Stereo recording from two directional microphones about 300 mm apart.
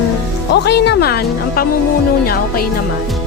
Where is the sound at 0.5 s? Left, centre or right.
Left.